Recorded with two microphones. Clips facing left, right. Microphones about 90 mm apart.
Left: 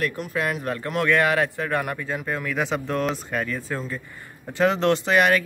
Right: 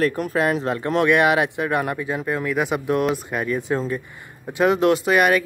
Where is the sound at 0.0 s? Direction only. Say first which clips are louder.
Right 6 dB; 35° right (ahead or behind).